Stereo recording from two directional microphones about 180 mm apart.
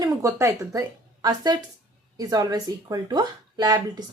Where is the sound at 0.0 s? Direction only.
15° right (ahead or behind).